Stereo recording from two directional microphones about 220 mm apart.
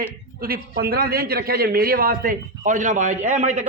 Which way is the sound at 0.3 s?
45° right (ahead or behind).